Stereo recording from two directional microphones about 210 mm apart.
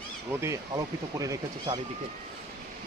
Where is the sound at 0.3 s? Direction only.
10° right (ahead or behind).